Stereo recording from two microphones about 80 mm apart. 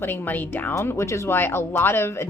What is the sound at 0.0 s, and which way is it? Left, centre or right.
Speech, left.